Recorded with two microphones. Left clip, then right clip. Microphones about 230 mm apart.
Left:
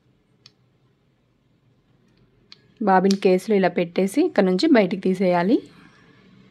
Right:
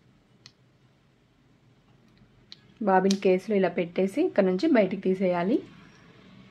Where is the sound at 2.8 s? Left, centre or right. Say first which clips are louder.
Left 5 dB; left.